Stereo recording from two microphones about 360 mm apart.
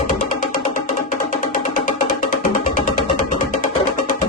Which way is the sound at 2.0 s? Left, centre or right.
Left.